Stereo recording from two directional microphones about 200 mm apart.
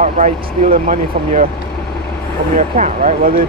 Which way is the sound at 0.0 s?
40° right (ahead or behind).